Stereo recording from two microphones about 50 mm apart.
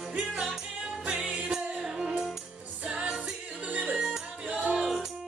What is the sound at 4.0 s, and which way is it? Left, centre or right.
Music, centre.